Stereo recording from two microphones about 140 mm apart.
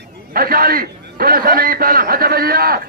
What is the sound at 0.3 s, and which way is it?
A man's voice, 90° right.